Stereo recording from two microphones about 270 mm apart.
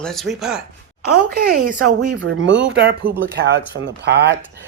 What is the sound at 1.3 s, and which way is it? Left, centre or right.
Speech, right.